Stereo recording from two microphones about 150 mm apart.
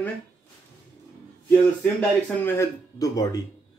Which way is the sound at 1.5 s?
10° left (ahead or behind).